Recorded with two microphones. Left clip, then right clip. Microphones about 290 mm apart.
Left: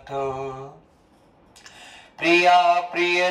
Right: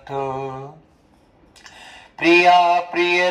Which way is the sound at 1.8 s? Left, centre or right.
Centre.